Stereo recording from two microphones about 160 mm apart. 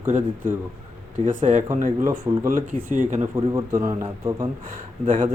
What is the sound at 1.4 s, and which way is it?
Speech, 55° right (ahead or behind).